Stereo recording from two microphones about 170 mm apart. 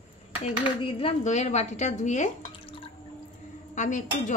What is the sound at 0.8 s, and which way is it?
A woman's voice, 35° left (ahead or behind).